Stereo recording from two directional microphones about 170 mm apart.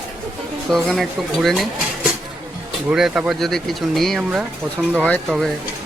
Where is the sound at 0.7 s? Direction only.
Centre (ahead or behind).